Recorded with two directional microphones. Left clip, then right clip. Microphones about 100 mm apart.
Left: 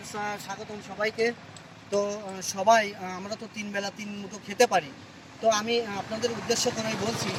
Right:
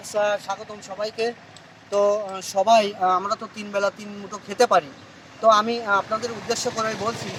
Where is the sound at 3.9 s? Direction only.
30° right (ahead or behind).